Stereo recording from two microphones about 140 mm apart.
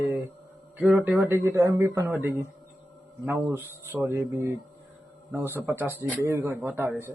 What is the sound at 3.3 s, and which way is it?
Speech, 15° right (ahead or behind).